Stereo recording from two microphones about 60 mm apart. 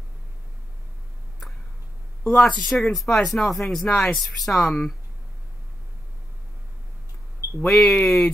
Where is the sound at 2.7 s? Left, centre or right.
Centre.